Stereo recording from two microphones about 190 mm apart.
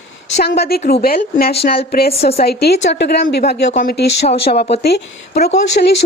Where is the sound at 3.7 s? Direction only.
50° left (ahead or behind).